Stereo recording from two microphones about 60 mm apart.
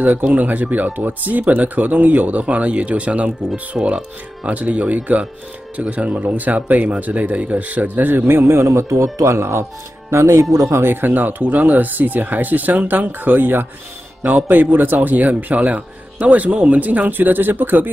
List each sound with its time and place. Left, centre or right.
0.0 s speech: right
10.8 s speech: right